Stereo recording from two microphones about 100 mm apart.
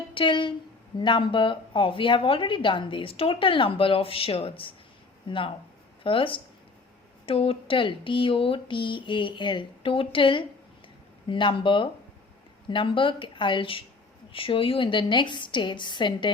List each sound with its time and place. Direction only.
0.1 s a woman's voice: 55° left (ahead or behind)
5.3 s a woman's voice: 55° left (ahead or behind)